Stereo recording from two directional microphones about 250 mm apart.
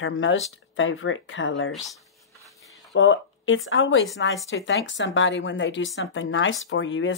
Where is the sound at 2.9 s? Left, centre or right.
Left.